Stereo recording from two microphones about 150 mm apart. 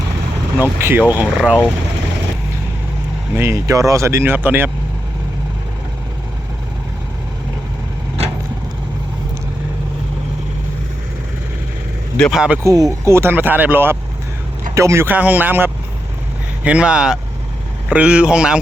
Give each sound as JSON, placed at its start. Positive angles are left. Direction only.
{"t": 0.6, "sound": "speech", "side_deg": -15}
{"t": 3.3, "sound": "speech", "side_deg": -20}
{"t": 12.1, "sound": "speech", "side_deg": 5}
{"t": 12.6, "sound": "speech", "side_deg": -20}